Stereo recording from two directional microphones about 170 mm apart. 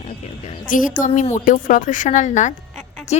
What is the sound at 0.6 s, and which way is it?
A woman's voice, 50° left (ahead or behind).